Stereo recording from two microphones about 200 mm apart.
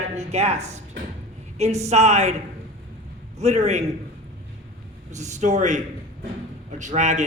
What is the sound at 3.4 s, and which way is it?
Speech, 35° right (ahead or behind).